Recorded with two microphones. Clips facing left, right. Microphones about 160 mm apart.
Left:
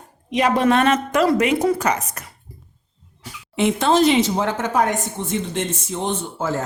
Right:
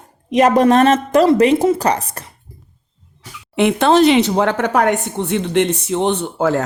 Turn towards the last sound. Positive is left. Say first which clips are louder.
# right 7 dB
turn(degrees=-65)  # may be behind; listen again after turning